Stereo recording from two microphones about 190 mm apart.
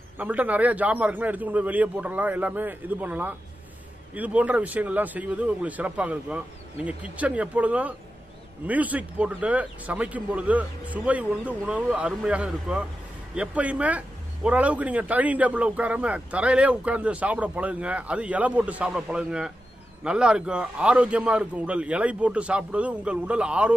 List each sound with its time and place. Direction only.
0.2 s a man's voice: 10° right (ahead or behind)